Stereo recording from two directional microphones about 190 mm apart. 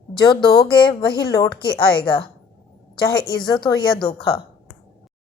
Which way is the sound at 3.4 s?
25° left (ahead or behind).